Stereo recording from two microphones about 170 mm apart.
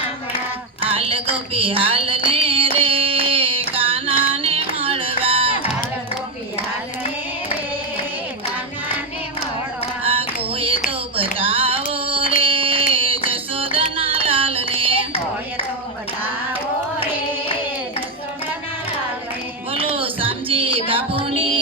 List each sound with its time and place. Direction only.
0.8 s music: 35° right (ahead or behind)
2.3 s carnatic music: 35° right (ahead or behind)
10.0 s a sound: 35° right (ahead or behind)
12.4 s music: 30° right (ahead or behind)
19.7 s music: 30° right (ahead or behind)